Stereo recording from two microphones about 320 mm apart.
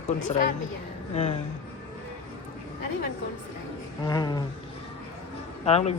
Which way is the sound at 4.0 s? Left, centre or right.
Centre.